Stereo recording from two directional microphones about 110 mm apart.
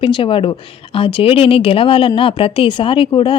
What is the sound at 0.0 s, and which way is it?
A woman's voice, 50° left (ahead or behind).